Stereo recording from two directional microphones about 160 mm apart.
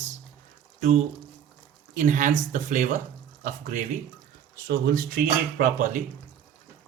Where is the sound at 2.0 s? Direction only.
55° right (ahead or behind).